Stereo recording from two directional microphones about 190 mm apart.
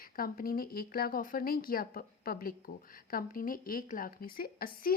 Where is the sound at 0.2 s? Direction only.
50° left (ahead or behind).